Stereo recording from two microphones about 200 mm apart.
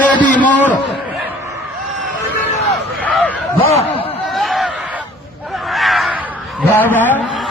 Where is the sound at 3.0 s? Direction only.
5° left (ahead or behind).